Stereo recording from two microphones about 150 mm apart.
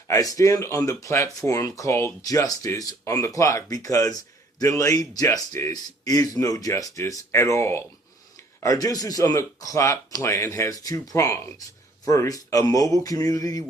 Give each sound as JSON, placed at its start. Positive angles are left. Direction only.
{"t": 0.1, "sound": "speech", "side_deg": 20}